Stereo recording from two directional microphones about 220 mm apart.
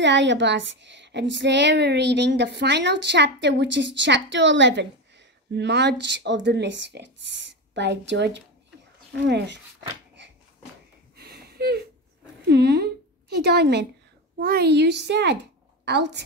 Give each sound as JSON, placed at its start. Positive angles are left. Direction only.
{"t": 0.0, "sound": "a woman's voice", "side_deg": -55}
{"t": 11.1, "sound": "a sound", "side_deg": -45}
{"t": 14.4, "sound": "a woman's voice", "side_deg": -45}